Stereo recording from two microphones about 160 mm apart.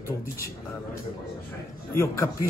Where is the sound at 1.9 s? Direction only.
15° left (ahead or behind).